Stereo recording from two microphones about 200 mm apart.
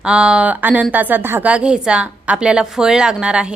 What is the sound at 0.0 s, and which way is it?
A woman's voice, 5° right (ahead or behind).